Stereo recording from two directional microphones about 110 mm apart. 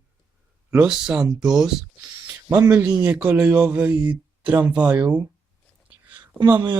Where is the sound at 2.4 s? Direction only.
25° right (ahead or behind).